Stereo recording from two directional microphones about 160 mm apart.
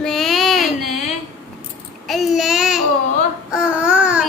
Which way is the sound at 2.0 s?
Centre (ahead or behind).